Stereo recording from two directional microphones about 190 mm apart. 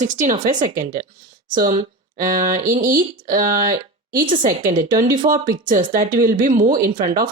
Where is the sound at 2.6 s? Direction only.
45° right (ahead or behind).